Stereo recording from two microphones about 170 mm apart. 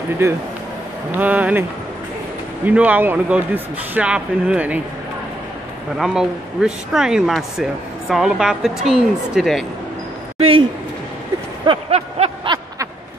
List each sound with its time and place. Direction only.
1.1 s speech: 10° right (ahead or behind)
5.9 s speech: 5° right (ahead or behind)
11.6 s a sound: 35° right (ahead or behind)